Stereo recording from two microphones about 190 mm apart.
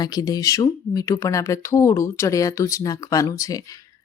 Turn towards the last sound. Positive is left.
turn(degrees=15)  # may be behind; listen again after turning